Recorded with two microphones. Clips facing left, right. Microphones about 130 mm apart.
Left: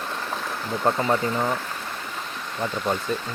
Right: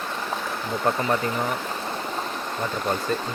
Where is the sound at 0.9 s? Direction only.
20° left (ahead or behind).